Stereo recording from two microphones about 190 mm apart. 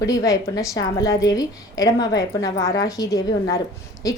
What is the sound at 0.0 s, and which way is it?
A woman's voice, 20° left (ahead or behind).